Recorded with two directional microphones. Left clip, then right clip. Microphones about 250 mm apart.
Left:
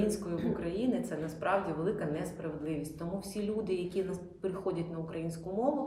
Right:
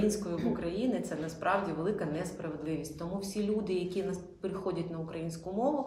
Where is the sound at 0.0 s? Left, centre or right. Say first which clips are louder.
Right 1 dB; centre.